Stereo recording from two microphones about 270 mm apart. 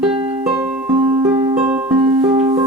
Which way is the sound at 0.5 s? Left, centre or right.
Centre.